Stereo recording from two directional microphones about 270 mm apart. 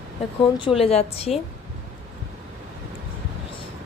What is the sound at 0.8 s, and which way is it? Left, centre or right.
Speech, left.